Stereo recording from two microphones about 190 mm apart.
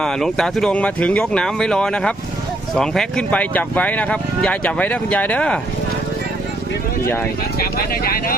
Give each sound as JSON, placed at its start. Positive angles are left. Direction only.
{"t": 0.0, "sound": "speech", "side_deg": 5}
{"t": 7.6, "sound": "speech", "side_deg": 50}